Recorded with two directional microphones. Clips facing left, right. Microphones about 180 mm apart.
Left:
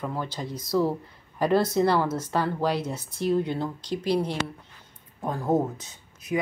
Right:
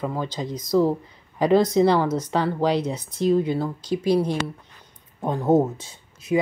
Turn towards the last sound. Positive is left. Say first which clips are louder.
# right 6 dB
turn(degrees=-30)  # may be behind; listen again after turning